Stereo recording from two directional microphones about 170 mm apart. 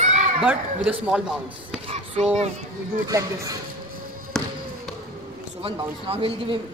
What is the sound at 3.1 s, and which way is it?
Speech, 20° right (ahead or behind).